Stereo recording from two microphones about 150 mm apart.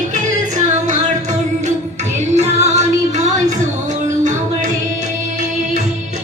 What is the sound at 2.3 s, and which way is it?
Music, 45° right (ahead or behind).